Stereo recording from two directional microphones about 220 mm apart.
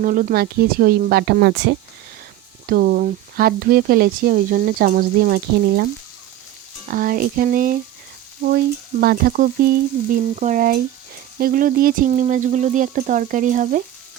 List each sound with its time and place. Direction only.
0.0 s frying: 40° right (ahead or behind)
2.6 s speech: 40° right (ahead or behind)
6.9 s speech: 40° right (ahead or behind)
8.4 s frying: 45° right (ahead or behind)
11.3 s speech: 40° right (ahead or behind)